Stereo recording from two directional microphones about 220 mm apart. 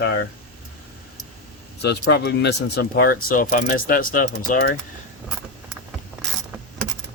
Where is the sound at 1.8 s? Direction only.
50° left (ahead or behind).